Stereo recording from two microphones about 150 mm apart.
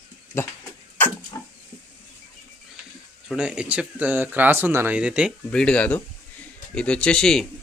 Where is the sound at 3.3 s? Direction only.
5° right (ahead or behind).